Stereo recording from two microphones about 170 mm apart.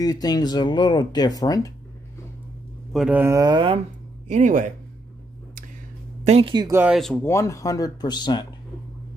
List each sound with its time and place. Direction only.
0.0 s speech: 20° left (ahead or behind)
2.9 s speech: centre (ahead or behind)
3.2 s speech: 20° right (ahead or behind)
4.3 s speech: 50° right (ahead or behind)
6.2 s speech: 35° right (ahead or behind)
6.8 s speech: centre (ahead or behind)
7.2 s speech: 15° left (ahead or behind)